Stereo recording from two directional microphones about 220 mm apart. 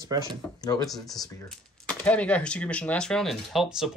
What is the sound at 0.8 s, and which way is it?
Speech, centre (ahead or behind).